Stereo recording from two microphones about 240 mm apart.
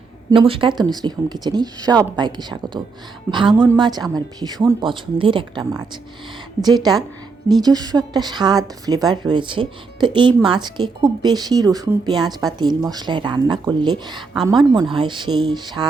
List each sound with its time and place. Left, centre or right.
0.3 s a woman's voice: right